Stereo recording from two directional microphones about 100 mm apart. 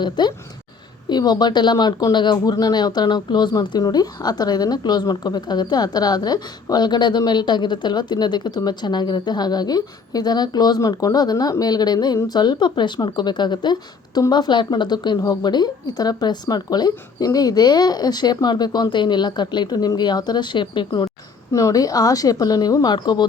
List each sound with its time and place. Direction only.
0.0 s speech: 45° left (ahead or behind)
21.5 s a woman's voice: 35° left (ahead or behind)